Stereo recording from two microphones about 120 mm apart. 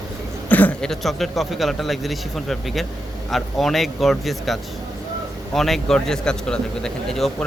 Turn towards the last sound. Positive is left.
turn(degrees=5)  # may be behind; listen again after turning